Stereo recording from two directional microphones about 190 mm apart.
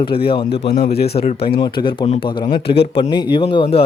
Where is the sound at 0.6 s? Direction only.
55° left (ahead or behind).